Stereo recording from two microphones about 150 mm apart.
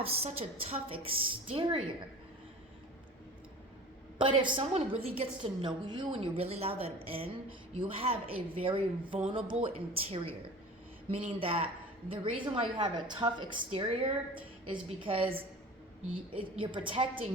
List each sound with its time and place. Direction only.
0.0 s a woman's voice: 40° right (ahead or behind)
4.2 s a woman's voice: 35° right (ahead or behind)